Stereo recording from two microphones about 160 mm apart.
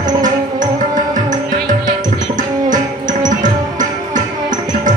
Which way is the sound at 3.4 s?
55° right (ahead or behind).